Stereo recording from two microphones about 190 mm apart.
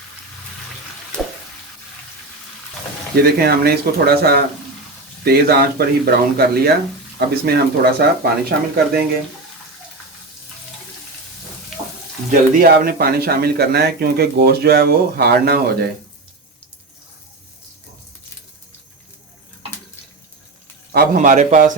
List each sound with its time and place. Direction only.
1.2 s a sound: centre (ahead or behind)
3.2 s speech: 55° right (ahead or behind)
12.3 s speech: 50° right (ahead or behind)
20.9 s a man's voice: 50° right (ahead or behind)